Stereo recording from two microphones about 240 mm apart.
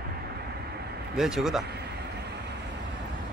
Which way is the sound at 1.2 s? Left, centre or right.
Centre.